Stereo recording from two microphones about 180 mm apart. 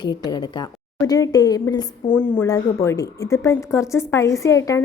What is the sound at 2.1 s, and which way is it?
A woman's voice, 10° left (ahead or behind).